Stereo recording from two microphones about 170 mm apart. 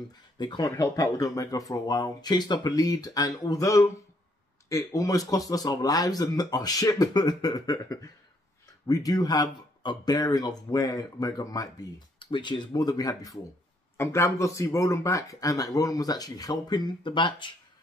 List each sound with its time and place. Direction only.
0.4 s speech: 25° left (ahead or behind)